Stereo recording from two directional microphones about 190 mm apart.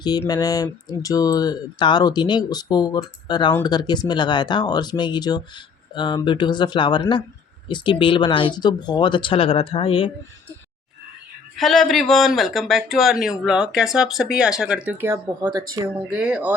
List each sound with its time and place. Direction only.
0.0 s speech: 20° left (ahead or behind)
11.5 s speech: centre (ahead or behind); by 15.6 s 20° right (ahead or behind)
16.0 s speech: 5° right (ahead or behind)